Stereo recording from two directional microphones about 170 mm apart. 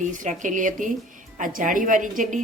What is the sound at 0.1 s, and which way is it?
Speech, 50° right (ahead or behind).